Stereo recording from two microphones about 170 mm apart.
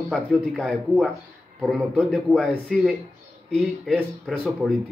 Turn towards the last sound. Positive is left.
turn(degrees=5)  # may be behind; listen again after turning